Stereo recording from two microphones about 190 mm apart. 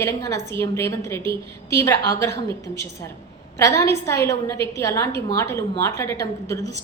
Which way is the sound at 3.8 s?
15° left (ahead or behind).